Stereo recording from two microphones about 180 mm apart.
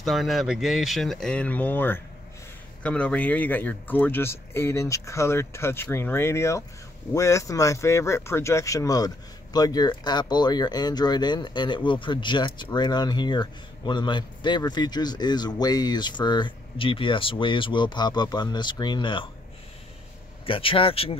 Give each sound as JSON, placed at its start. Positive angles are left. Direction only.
{"t": 0.0, "sound": "speech", "side_deg": 0}
{"t": 20.4, "sound": "speech", "side_deg": 30}